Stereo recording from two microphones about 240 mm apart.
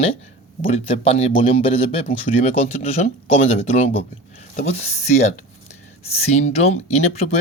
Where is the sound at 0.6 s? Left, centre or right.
Left.